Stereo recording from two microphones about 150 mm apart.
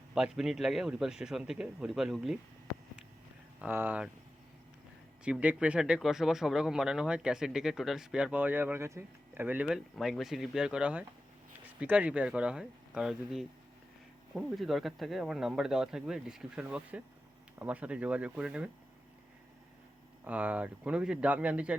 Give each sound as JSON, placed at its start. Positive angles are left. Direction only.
{"t": 0.1, "sound": "speech", "side_deg": 0}
{"t": 3.6, "sound": "speech", "side_deg": -15}
{"t": 5.2, "sound": "speech", "side_deg": -10}
{"t": 20.2, "sound": "speech", "side_deg": -10}